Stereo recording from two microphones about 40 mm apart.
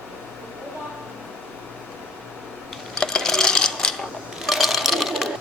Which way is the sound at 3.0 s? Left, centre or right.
Centre.